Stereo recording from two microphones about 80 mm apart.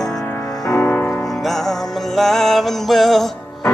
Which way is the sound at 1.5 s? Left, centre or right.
Centre.